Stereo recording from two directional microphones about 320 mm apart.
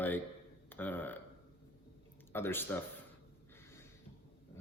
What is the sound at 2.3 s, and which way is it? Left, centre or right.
Speech, centre.